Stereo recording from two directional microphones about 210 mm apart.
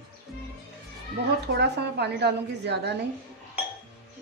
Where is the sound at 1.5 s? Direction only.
50° right (ahead or behind).